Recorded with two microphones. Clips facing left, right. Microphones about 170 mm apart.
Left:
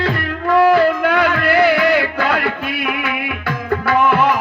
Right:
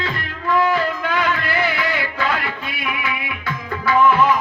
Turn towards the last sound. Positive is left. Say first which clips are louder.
# left 1 dB
turn(degrees=65)  # may be behind; listen again after turning